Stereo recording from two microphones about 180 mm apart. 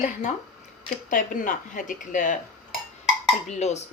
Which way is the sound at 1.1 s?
50° left (ahead or behind).